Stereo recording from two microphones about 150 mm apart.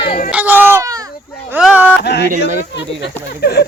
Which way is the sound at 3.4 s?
90° left.